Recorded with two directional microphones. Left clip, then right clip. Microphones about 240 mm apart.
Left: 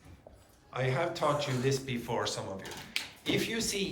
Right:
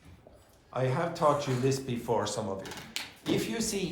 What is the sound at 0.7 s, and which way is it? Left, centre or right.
Speech, centre.